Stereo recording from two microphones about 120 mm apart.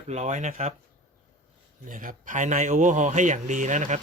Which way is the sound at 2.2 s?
90° right.